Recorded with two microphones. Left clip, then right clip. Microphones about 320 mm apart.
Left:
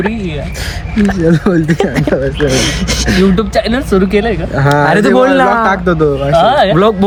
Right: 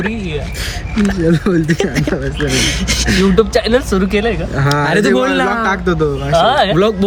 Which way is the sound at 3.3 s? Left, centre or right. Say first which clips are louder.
Right 1 dB; centre.